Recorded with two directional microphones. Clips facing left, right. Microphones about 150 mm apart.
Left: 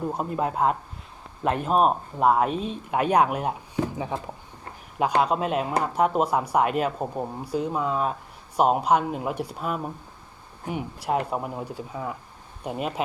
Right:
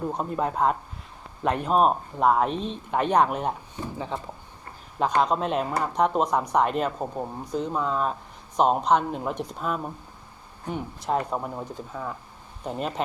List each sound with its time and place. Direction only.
0.0 s speech: 5° left (ahead or behind)